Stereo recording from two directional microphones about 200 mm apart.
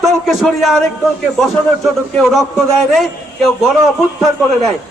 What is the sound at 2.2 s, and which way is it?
Speech, centre (ahead or behind).